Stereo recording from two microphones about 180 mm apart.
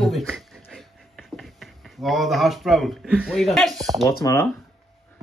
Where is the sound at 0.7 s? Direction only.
Centre (ahead or behind).